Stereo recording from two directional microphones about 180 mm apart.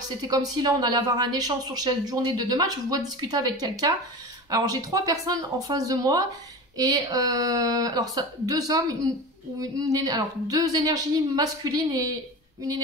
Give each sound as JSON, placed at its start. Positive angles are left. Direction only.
{"t": 0.2, "sound": "speech", "side_deg": -20}